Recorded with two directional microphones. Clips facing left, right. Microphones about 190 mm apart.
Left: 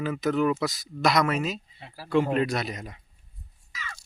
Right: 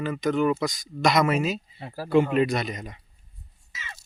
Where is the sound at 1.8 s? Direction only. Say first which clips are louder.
Right 9 dB; 45° right (ahead or behind).